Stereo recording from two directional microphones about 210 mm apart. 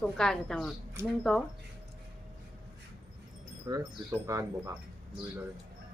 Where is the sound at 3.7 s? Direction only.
15° right (ahead or behind).